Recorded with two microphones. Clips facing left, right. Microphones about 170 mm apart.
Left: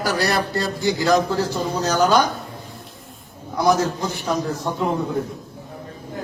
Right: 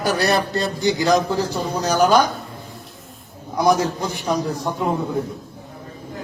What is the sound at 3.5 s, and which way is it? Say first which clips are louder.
A man's voice: right 1 dB; 15° right (ahead or behind).